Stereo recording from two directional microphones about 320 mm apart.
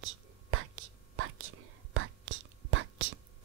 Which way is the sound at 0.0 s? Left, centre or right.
Right.